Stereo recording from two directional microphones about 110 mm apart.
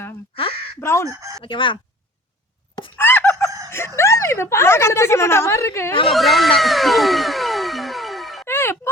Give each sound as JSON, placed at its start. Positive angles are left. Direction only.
{"t": 0.8, "sound": "speech", "side_deg": 25}
{"t": 1.0, "sound": "speech", "side_deg": -30}
{"t": 1.5, "sound": "speech", "side_deg": 50}
{"t": 3.0, "sound": "chicken", "side_deg": 20}
{"t": 3.7, "sound": "speech", "side_deg": 20}
{"t": 5.9, "sound": "speech", "side_deg": 55}
{"t": 6.1, "sound": "speech", "side_deg": 0}
{"t": 6.6, "sound": "music", "side_deg": 0}
{"t": 8.4, "sound": "a sound", "side_deg": 20}